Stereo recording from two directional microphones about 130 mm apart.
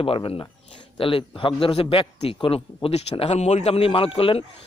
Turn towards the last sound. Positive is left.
turn(degrees=45)  # may be behind; listen again after turning